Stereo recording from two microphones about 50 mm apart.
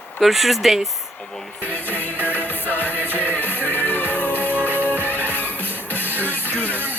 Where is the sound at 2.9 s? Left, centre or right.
Right.